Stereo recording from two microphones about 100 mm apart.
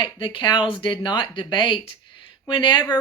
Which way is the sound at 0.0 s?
55° left (ahead or behind).